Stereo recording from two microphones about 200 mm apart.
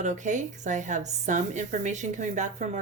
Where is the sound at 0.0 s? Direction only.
35° right (ahead or behind).